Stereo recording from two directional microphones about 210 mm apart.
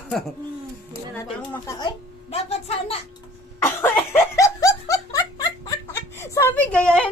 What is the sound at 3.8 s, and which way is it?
Laughter, 10° left (ahead or behind).